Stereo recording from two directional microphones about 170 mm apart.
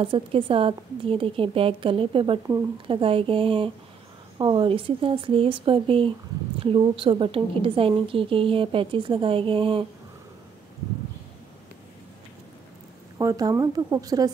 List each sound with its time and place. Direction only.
0.0 s a woman's voice: 30° right (ahead or behind)
13.2 s speech: 20° right (ahead or behind)